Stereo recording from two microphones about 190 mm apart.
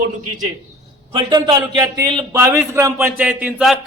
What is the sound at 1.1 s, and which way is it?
A man's voice, 25° right (ahead or behind).